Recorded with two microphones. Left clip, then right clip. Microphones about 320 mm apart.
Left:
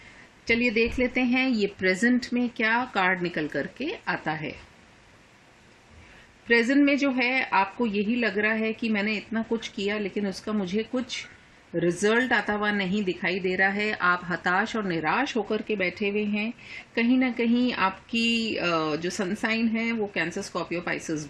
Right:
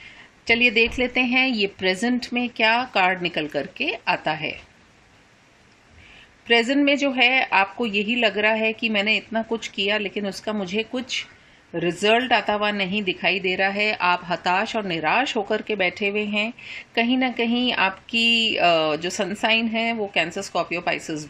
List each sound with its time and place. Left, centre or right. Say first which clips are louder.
0.4 s speech: right 6 dB; centre
6.5 s speech: right 3 dB; centre